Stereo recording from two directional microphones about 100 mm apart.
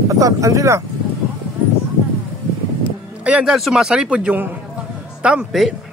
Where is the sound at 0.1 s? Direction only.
35° right (ahead or behind).